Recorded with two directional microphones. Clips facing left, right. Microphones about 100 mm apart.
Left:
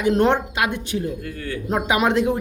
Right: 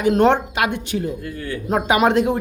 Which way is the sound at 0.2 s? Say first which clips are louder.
Right 3 dB; 75° right (ahead or behind).